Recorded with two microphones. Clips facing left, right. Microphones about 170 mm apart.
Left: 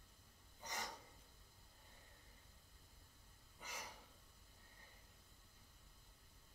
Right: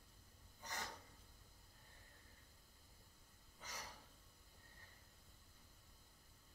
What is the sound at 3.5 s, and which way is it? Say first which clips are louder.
Gasp: left 1 dB; 15° left (ahead or behind).